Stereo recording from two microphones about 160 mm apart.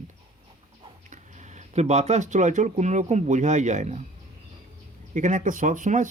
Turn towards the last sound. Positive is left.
turn(degrees=-55)  # may be behind; listen again after turning